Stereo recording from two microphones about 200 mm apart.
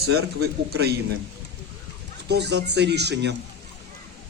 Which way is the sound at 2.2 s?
55° right (ahead or behind).